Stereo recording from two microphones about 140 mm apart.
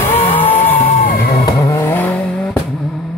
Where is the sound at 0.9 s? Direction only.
80° left.